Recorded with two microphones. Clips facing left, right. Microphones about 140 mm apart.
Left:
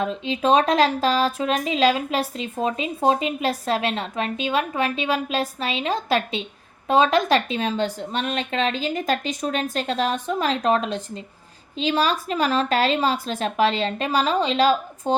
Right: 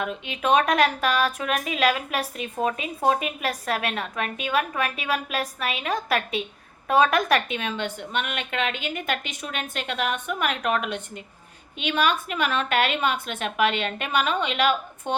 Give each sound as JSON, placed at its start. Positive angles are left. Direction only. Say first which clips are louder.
{"t": 0.0, "sound": "speech", "louder": "left 5 dB", "side_deg": 30}